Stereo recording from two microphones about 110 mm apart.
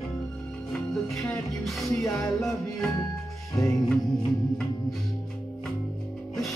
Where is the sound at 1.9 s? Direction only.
30° left (ahead or behind).